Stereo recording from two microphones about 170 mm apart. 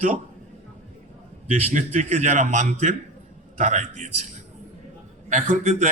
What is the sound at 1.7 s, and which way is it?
A man's voice, 40° right (ahead or behind).